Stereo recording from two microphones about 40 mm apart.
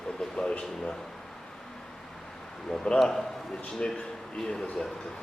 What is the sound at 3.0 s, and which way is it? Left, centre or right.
Speech, centre.